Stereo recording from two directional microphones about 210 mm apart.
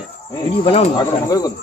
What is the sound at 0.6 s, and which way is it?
Speech, 25° left (ahead or behind).